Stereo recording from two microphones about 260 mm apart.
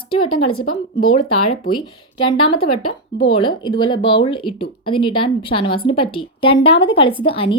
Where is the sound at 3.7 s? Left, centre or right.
Centre.